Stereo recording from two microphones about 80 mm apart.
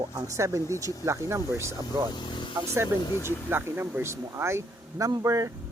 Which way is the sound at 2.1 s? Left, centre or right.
Left.